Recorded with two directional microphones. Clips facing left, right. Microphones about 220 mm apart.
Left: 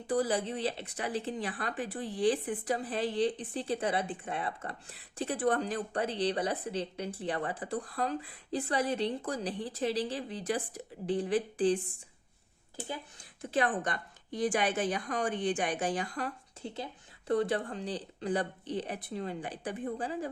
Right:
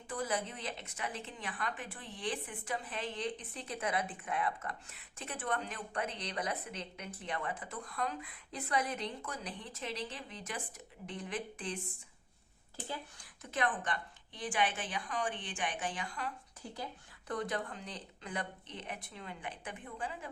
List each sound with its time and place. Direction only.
0.1 s speech: 35° left (ahead or behind)
13.4 s speech: 30° left (ahead or behind)
16.6 s speech: 25° left (ahead or behind)